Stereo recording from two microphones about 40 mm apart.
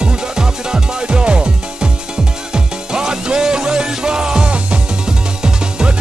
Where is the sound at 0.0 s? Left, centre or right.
Centre.